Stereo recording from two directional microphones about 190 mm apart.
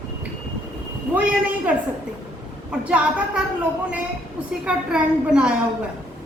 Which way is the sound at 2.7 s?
5° right (ahead or behind).